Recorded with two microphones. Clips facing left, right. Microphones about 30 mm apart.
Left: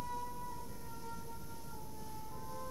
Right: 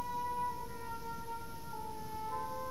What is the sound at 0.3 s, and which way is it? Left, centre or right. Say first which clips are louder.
Siren: right 9 dB; right.